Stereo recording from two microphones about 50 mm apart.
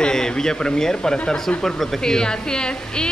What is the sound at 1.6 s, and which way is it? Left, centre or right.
Speech, centre.